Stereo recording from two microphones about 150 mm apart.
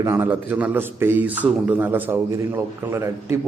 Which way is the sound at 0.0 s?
15° right (ahead or behind).